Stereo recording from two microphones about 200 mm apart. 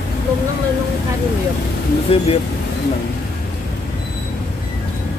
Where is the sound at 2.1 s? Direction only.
30° left (ahead or behind).